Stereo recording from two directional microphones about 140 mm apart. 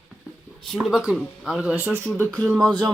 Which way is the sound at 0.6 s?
Centre (ahead or behind).